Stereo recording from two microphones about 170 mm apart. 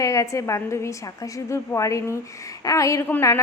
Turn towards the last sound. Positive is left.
turn(degrees=15)  # may be behind; listen again after turning